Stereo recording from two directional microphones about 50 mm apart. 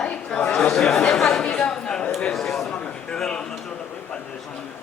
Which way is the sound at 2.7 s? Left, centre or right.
Centre.